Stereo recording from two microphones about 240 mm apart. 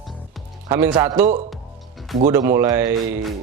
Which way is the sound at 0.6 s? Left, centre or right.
Centre.